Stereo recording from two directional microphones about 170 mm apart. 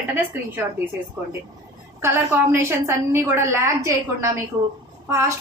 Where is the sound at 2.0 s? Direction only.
15° right (ahead or behind).